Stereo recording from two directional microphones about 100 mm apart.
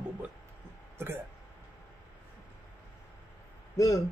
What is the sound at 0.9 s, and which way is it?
Speech, 25° right (ahead or behind).